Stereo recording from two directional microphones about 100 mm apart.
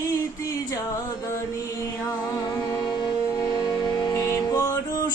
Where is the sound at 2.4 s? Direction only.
45° left (ahead or behind).